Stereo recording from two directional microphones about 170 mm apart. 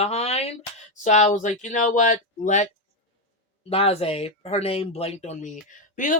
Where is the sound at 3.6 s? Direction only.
35° left (ahead or behind); by 6.2 s 50° left (ahead or behind).